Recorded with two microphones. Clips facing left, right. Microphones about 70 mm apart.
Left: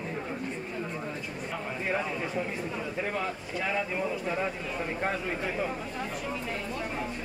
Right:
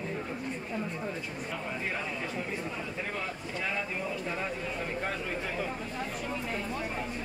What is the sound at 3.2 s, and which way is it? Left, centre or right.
Speech, centre.